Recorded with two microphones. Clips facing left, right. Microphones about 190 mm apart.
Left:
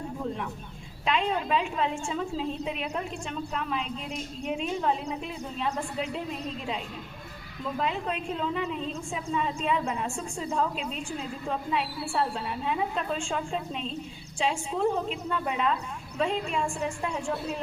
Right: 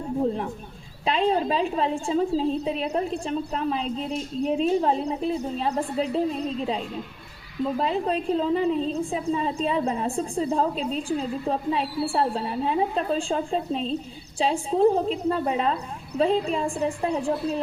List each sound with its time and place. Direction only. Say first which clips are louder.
0.2 s a woman's voice: right 11 dB; 35° right (ahead or behind)